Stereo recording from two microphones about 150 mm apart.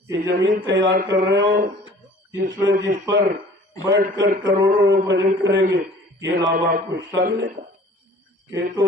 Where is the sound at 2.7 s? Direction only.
65° right (ahead or behind).